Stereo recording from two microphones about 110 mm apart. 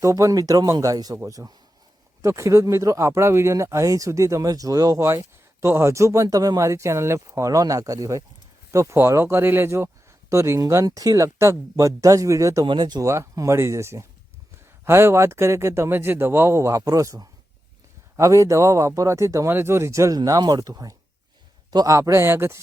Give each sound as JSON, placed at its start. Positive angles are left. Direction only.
{"t": 0.0, "sound": "speech", "side_deg": -30}
{"t": 12.6, "sound": "speech", "side_deg": -40}